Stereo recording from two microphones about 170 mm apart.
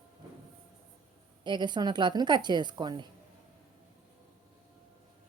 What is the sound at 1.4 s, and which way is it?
A woman's voice, 25° right (ahead or behind).